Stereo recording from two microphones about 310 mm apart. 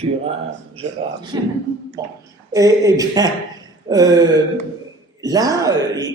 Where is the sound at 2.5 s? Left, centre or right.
Centre.